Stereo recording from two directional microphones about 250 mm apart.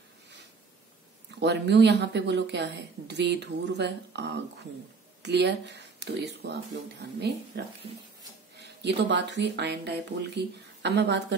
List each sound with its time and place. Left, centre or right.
1.3 s speech: right
8.8 s speech: right